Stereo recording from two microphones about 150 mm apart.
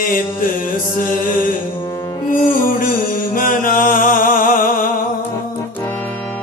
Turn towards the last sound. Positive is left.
turn(degrees=65)  # may be behind; listen again after turning